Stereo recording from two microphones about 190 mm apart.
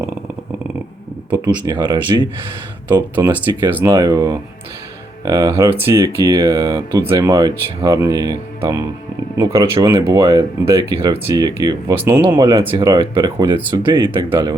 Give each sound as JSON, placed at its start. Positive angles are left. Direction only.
{"t": 1.3, "sound": "speech", "side_deg": -25}
{"t": 3.2, "sound": "speech", "side_deg": -15}
{"t": 3.9, "sound": "speech", "side_deg": -20}